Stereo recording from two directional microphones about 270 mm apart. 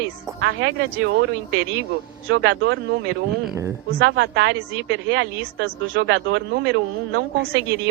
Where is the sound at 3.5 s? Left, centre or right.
Centre.